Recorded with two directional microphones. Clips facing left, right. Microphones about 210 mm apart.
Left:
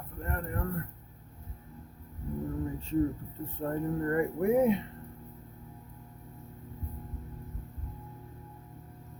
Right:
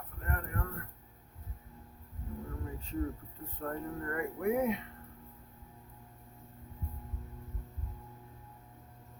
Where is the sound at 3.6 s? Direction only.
30° left (ahead or behind).